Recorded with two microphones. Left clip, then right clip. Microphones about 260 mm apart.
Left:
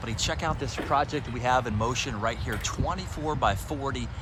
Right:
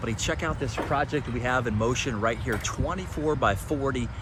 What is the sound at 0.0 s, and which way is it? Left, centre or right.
Speech, centre.